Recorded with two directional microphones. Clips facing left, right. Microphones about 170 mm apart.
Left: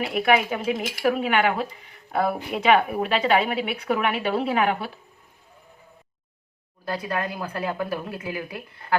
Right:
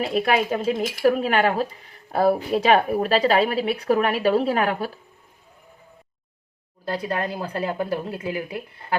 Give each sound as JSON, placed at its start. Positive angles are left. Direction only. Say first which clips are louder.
{"t": 0.0, "sound": "a woman's voice", "louder": "even", "side_deg": -30}
{"t": 7.1, "sound": "a woman's voice", "louder": "right 1 dB", "side_deg": -30}